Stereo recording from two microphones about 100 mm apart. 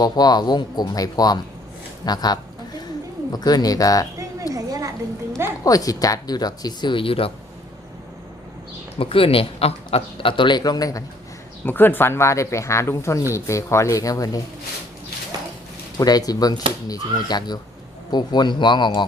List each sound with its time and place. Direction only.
0.0 s a woman's voice: 40° left (ahead or behind)
4.5 s a sound: 35° right (ahead or behind)
5.5 s a woman's voice: 35° left (ahead or behind)
6.9 s speech: 65° left (ahead or behind)
9.0 s speech: 65° left (ahead or behind); by 11.0 s 40° left (ahead or behind)
11.6 s speech: 20° left (ahead or behind); by 14.4 s 35° left (ahead or behind)
16.0 s a woman's voice: 40° left (ahead or behind)